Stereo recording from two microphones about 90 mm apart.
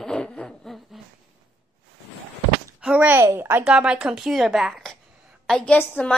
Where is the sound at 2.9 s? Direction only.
20° right (ahead or behind).